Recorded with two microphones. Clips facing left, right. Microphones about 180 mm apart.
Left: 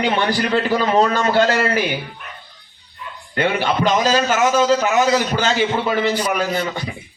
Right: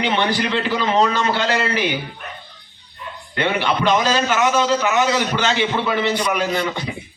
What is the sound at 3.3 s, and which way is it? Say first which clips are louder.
A man's voice: left 1 dB; 45° left (ahead or behind).